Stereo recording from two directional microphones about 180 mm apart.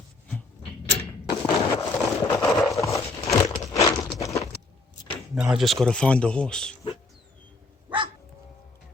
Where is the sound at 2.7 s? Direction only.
15° left (ahead or behind).